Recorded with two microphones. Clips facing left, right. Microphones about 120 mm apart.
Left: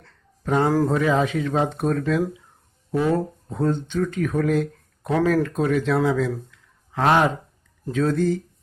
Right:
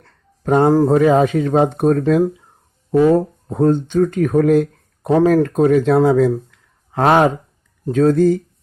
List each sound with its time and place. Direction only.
0.0 s a sound: 45° right (ahead or behind)
0.9 s speech: 45° right (ahead or behind)
3.5 s speech: 45° right (ahead or behind)
5.0 s speech: 35° right (ahead or behind)
5.3 s speech: 45° right (ahead or behind)
6.5 s a sound: 45° right (ahead or behind)
7.9 s speech: 45° right (ahead or behind)